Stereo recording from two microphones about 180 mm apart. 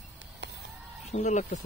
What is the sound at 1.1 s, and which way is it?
Speech, 40° left (ahead or behind).